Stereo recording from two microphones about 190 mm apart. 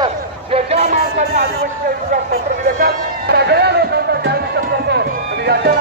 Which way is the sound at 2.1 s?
50° right (ahead or behind).